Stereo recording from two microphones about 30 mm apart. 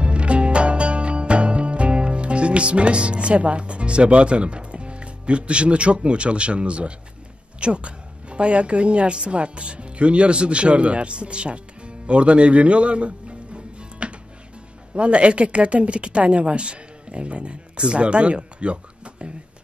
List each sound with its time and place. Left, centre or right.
0.0 s music: right
7.6 s a woman's voice: right